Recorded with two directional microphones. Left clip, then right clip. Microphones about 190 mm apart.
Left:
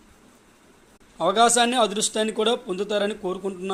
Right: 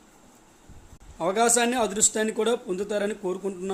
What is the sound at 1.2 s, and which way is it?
Speech, 5° right (ahead or behind).